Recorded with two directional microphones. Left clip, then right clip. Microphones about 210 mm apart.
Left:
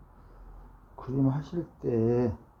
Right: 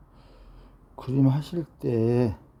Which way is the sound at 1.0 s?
50° right (ahead or behind).